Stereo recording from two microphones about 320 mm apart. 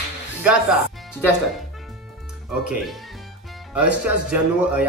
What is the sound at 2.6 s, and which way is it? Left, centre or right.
Speech, centre.